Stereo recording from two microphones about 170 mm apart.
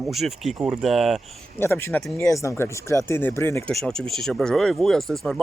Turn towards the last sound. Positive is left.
turn(degrees=0)  # may be behind; listen again after turning